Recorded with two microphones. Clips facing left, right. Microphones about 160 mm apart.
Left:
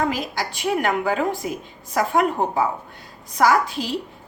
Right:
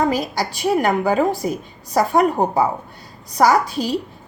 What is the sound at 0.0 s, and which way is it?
A woman's voice, 40° right (ahead or behind).